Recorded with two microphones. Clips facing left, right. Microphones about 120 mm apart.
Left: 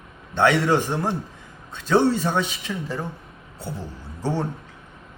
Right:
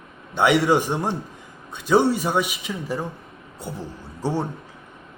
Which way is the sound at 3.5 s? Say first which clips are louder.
Even; 15° right (ahead or behind).